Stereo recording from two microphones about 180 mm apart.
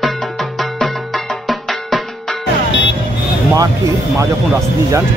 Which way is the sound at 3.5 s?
20° right (ahead or behind).